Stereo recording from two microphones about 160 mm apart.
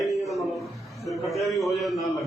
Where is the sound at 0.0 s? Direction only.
20° left (ahead or behind).